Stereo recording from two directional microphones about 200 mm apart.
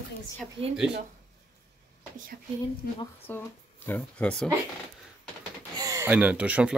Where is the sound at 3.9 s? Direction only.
5° left (ahead or behind).